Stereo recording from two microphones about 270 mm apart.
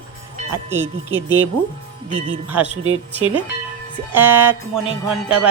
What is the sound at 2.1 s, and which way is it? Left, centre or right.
Speech, centre.